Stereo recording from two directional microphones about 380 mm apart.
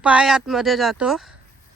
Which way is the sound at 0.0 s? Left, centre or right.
Centre.